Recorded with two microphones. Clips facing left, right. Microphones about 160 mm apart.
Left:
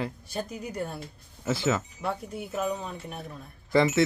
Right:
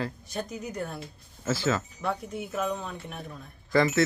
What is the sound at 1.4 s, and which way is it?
Speech, 20° left (ahead or behind).